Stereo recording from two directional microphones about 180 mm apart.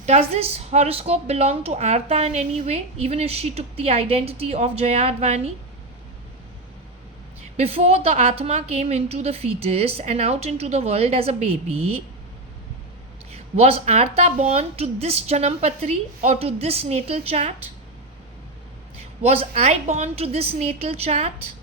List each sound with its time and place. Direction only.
0.0 s speech: 35° right (ahead or behind)
7.5 s speech: 35° right (ahead or behind)
13.3 s speech: 35° right (ahead or behind)
19.2 s speech: 35° right (ahead or behind)